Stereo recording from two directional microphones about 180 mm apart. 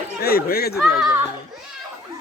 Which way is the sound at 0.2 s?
60° left (ahead or behind).